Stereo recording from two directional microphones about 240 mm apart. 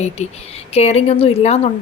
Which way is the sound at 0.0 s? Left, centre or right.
Left.